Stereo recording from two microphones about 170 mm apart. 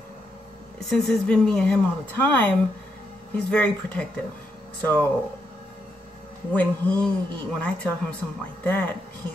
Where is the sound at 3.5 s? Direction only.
5° left (ahead or behind).